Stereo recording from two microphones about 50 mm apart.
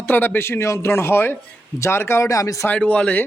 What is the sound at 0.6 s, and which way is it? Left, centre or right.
Speech, left.